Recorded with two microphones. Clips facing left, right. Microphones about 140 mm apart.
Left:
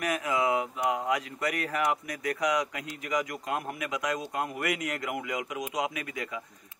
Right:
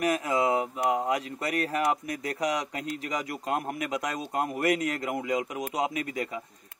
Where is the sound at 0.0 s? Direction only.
30° right (ahead or behind).